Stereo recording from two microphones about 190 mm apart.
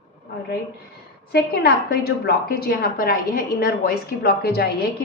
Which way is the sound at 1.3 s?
55° left (ahead or behind).